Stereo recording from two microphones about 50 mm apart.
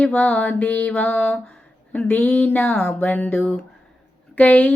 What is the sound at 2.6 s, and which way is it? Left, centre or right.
Speech, left.